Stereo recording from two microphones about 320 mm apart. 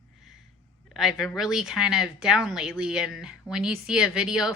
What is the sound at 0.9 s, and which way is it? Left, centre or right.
Speech, centre.